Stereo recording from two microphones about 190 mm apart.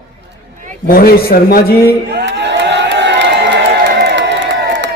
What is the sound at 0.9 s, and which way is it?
A man's voice, 50° left (ahead or behind).